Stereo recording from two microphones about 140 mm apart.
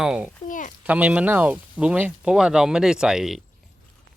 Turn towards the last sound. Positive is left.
turn(degrees=-5)  # may be behind; listen again after turning